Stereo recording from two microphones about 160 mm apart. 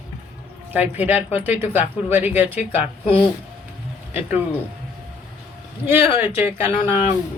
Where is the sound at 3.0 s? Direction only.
35° left (ahead or behind).